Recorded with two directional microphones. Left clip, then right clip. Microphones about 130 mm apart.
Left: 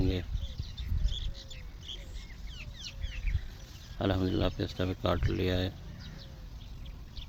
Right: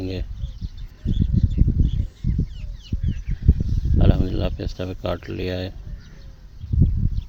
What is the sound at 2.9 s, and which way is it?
Chicken, 10° left (ahead or behind).